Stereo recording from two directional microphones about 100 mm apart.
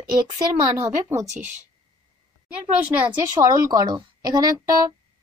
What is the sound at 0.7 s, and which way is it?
Speech, 25° right (ahead or behind).